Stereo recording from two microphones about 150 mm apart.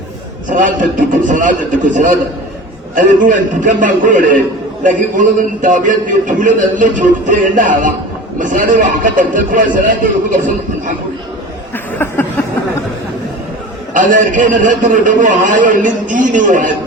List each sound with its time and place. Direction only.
0.5 s a man's voice: 60° right (ahead or behind)
13.9 s a man's voice: 60° right (ahead or behind)